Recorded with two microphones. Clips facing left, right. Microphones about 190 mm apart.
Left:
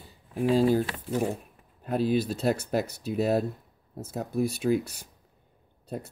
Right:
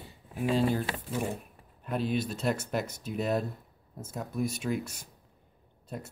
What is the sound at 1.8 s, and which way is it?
Speech, 35° left (ahead or behind).